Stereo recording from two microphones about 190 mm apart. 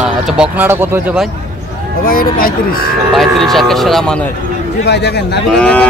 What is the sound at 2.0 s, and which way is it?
Speech, 50° left (ahead or behind).